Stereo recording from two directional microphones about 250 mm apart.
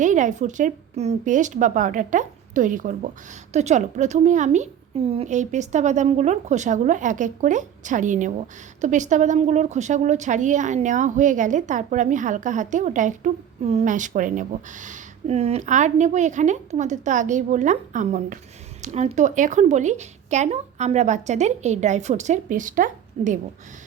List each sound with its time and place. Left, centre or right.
0.0 s a woman's voice: right